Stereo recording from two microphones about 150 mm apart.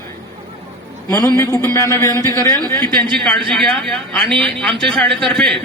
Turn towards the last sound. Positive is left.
turn(degrees=5)  # may be behind; listen again after turning